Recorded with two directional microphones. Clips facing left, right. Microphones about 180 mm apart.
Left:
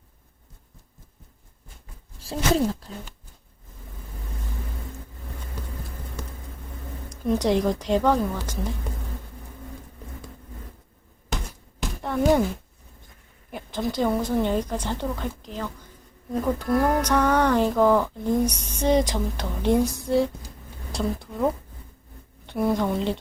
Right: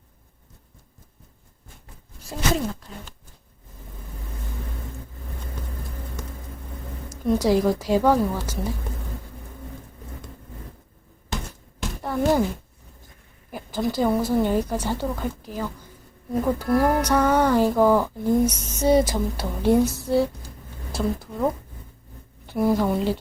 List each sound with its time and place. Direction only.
2.1 s speech: 30° left (ahead or behind)
7.1 s a woman's voice: 5° right (ahead or behind)
11.8 s a sound: centre (ahead or behind)
13.5 s a woman's voice: 5° right (ahead or behind)